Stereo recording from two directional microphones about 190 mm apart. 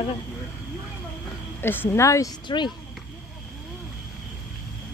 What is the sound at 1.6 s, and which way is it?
A woman's voice, 10° left (ahead or behind).